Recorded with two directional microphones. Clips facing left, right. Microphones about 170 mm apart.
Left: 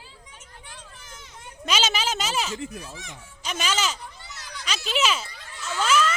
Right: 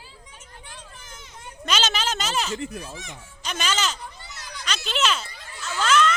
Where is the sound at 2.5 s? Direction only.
70° right (ahead or behind).